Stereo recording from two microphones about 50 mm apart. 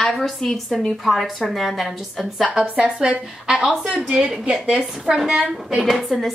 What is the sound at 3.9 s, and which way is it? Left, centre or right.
A woman's voice, right.